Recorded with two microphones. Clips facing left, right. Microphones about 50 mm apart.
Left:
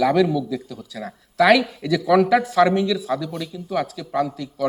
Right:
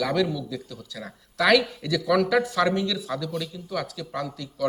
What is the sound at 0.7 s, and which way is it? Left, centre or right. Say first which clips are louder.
Speech: left 5 dB; left.